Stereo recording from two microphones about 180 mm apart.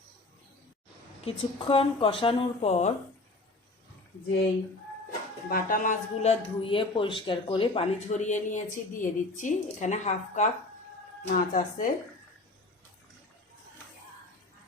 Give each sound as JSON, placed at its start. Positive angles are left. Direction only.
{"t": 1.2, "sound": "speech", "side_deg": 30}
{"t": 5.5, "sound": "speech", "side_deg": 50}
{"t": 11.3, "sound": "speech", "side_deg": 50}